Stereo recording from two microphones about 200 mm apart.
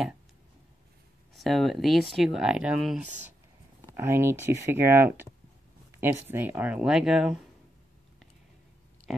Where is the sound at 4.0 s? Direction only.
10° right (ahead or behind).